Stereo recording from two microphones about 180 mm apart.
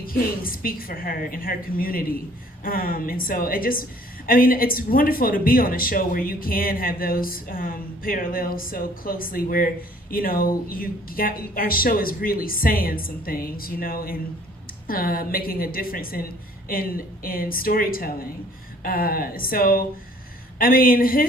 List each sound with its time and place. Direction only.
0.0 s speech: 50° left (ahead or behind)